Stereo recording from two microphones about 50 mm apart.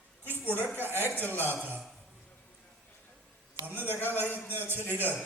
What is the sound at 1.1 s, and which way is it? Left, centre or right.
Speech, left.